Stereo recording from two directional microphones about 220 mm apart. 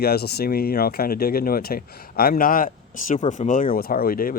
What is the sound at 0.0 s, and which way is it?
Speech, 45° left (ahead or behind).